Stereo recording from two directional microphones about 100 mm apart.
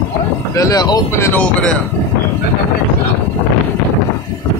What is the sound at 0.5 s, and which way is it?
Speech, 35° left (ahead or behind).